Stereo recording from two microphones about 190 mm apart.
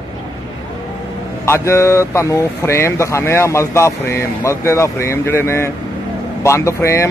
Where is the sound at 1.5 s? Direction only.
15° left (ahead or behind).